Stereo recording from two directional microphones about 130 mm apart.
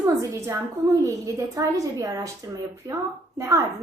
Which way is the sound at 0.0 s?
25° right (ahead or behind).